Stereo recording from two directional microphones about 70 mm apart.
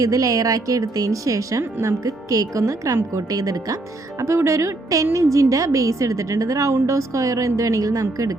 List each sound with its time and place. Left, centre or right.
0.0 s a woman's voice: right
4.2 s a woman's voice: right